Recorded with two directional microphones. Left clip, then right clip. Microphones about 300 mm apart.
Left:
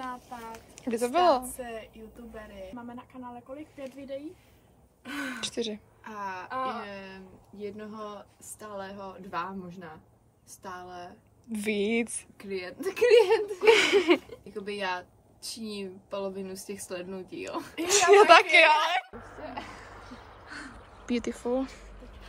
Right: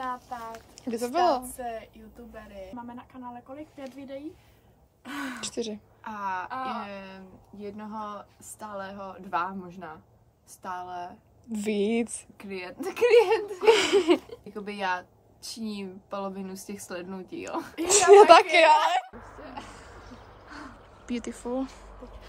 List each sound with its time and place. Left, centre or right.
0.0 s a sound: centre
0.8 s a woman's voice: centre
5.4 s a woman's voice: centre
10.6 s a woman's voice: centre
20.1 s a sound: right
21.2 s a woman's voice: centre